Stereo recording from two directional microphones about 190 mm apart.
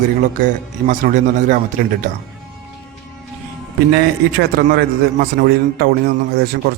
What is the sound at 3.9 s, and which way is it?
A man's voice, 55° right (ahead or behind).